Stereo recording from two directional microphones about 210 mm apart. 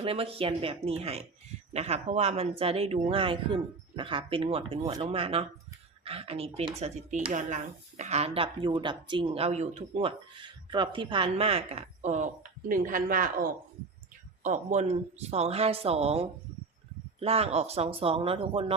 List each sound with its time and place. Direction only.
0.0 s speech: 25° right (ahead or behind)